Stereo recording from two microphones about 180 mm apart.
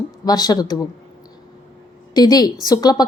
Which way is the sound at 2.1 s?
20° left (ahead or behind).